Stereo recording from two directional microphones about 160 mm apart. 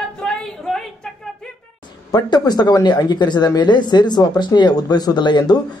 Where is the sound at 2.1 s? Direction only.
25° left (ahead or behind).